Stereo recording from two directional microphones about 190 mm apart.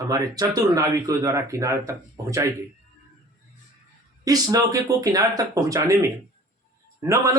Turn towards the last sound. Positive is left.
turn(degrees=-15)  # may be behind; listen again after turning